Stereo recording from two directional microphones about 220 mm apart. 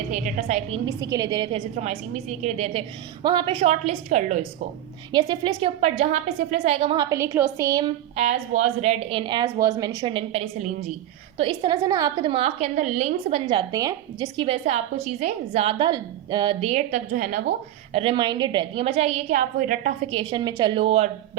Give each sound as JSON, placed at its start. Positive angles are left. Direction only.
{"t": 0.1, "sound": "a woman's voice", "side_deg": -30}
{"t": 0.9, "sound": "a woman's voice", "side_deg": -15}
{"t": 5.1, "sound": "a woman's voice", "side_deg": -20}